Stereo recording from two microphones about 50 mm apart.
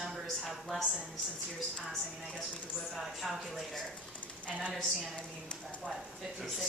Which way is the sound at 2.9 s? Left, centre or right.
Centre.